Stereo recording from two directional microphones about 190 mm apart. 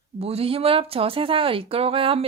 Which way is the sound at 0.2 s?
30° right (ahead or behind).